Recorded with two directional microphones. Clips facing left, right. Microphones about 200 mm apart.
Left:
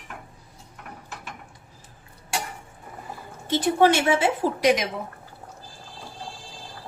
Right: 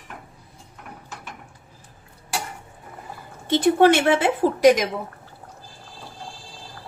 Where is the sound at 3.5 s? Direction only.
60° right (ahead or behind).